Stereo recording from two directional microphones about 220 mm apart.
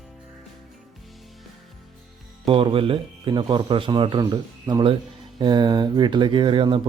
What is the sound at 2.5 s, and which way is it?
Speech, 25° right (ahead or behind).